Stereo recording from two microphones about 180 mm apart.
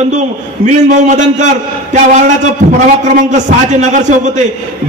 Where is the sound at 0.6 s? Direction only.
40° right (ahead or behind).